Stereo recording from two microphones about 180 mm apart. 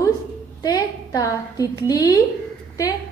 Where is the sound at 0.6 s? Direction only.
20° left (ahead or behind).